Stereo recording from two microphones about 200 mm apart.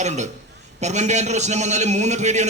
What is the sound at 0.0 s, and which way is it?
A man's voice, 35° right (ahead or behind).